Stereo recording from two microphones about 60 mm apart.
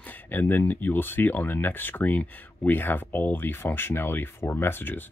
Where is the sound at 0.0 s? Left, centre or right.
Left.